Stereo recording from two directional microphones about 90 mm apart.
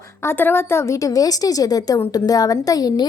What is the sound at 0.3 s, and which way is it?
A woman's voice, 25° left (ahead or behind).